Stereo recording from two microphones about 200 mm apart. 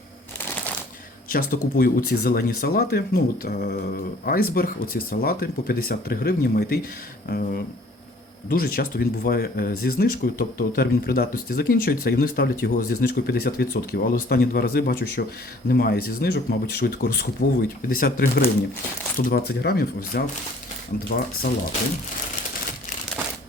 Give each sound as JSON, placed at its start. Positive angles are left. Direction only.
{"t": 1.3, "sound": "speech", "side_deg": 45}